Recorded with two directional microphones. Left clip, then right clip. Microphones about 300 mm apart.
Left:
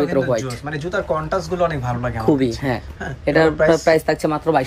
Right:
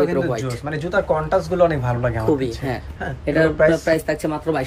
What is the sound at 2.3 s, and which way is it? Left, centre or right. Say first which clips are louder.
Speech: left 3 dB; left.